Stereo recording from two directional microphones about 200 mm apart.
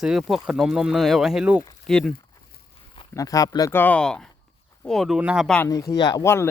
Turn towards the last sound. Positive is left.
turn(degrees=10)  # may be behind; listen again after turning